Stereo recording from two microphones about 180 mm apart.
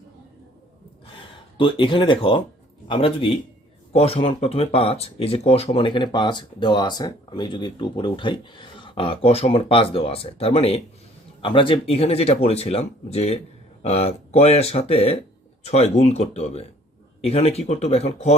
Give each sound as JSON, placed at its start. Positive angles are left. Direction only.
{"t": 1.5, "sound": "speech", "side_deg": 30}